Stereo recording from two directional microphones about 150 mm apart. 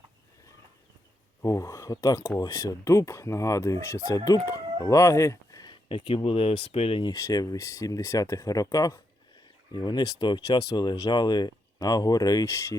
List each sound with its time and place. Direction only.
1.4 s speech: 20° left (ahead or behind); by 7.1 s 40° left (ahead or behind)
7.1 s speech: 25° left (ahead or behind)